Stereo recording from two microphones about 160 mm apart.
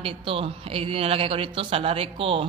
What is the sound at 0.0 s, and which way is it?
A man's voice, 35° right (ahead or behind).